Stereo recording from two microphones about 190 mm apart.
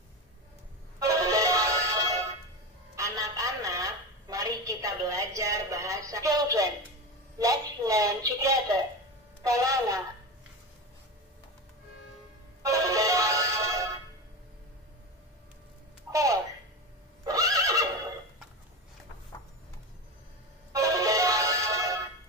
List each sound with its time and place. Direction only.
0.9 s music: 15° right (ahead or behind)
3.0 s telephone: 15° right (ahead or behind)
7.3 s a sound: 20° right (ahead or behind)
12.6 s music: 15° right (ahead or behind)
16.1 s a sound: 15° right (ahead or behind)
17.2 s neigh: 20° right (ahead or behind)
20.7 s music: 15° right (ahead or behind)